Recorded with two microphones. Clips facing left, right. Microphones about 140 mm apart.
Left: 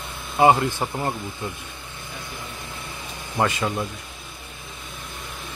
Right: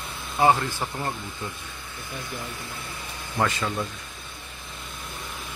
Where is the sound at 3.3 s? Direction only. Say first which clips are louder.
Left 3 dB; 15° left (ahead or behind).